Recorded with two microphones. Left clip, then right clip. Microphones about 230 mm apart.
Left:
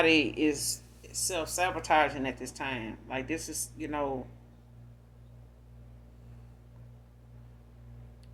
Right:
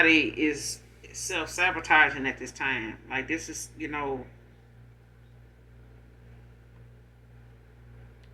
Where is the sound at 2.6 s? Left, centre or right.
Left.